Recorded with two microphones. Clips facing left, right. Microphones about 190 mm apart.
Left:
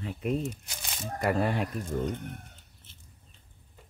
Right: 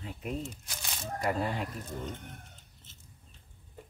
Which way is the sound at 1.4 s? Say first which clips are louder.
Left 5 dB; 65° left (ahead or behind).